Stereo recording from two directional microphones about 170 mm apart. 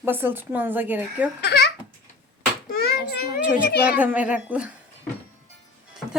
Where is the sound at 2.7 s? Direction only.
65° left (ahead or behind).